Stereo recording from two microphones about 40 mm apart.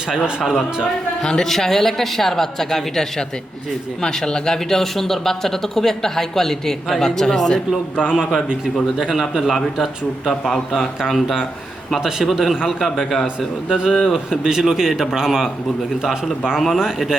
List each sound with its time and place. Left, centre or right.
0.1 s a man's voice: centre
1.2 s speech: centre
8.0 s a man's voice: centre
10.4 s speech: centre
11.9 s a man's voice: centre
13.7 s a man's voice: centre
13.9 s speech: centre
14.3 s a man's voice: centre
16.7 s a man's voice: centre